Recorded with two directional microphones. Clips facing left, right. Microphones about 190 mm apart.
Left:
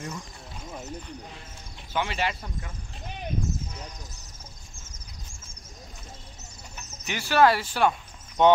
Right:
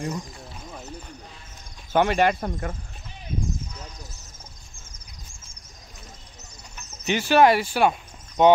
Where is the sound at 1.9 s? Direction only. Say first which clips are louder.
Right 9 dB; 50° right (ahead or behind).